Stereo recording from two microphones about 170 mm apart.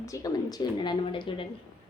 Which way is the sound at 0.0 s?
20° left (ahead or behind).